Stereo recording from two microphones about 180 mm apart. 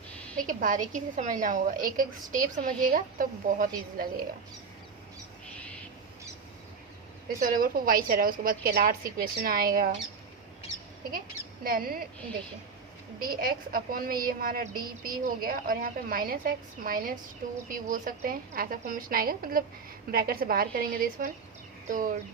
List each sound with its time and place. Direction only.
0.3 s a woman's voice: 50° right (ahead or behind)
7.4 s a woman's voice: 50° right (ahead or behind)
11.6 s a woman's voice: 55° right (ahead or behind)
13.1 s a woman's voice: 50° right (ahead or behind)